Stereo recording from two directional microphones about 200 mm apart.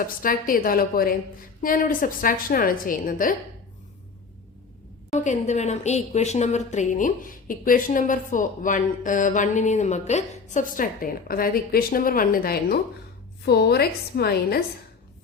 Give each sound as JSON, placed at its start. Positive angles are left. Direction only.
{"t": 0.0, "sound": "a woman's voice", "side_deg": 45}
{"t": 5.1, "sound": "a woman's voice", "side_deg": 35}